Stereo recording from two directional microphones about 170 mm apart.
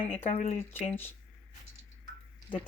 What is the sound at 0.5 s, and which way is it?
Speech, 10° left (ahead or behind).